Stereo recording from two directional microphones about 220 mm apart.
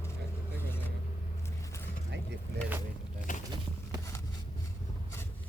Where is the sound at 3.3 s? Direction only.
35° left (ahead or behind).